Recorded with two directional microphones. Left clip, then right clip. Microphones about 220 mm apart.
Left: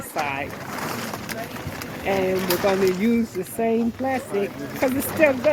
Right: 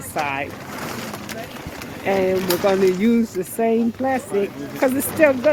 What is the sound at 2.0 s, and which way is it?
Speech, 30° right (ahead or behind).